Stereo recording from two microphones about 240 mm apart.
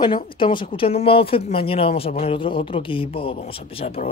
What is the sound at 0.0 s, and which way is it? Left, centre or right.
Speech, centre.